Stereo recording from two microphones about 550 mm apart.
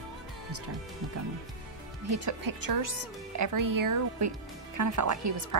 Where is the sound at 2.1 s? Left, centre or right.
Right.